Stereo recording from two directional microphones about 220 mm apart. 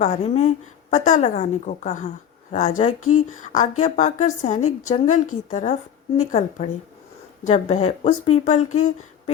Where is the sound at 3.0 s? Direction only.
80° left.